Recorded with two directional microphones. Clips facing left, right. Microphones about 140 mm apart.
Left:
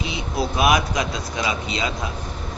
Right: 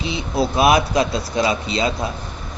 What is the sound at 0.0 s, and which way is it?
Speech, 30° right (ahead or behind).